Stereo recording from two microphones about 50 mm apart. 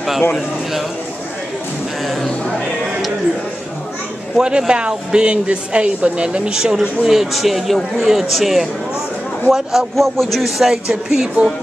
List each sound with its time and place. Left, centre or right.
4.4 s a man's voice: centre